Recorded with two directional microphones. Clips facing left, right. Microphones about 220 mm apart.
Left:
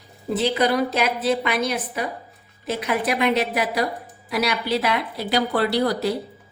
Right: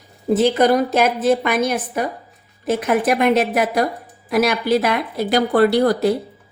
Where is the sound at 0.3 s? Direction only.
45° right (ahead or behind).